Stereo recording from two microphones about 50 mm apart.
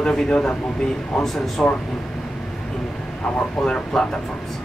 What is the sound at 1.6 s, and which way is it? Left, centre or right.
Speech, centre.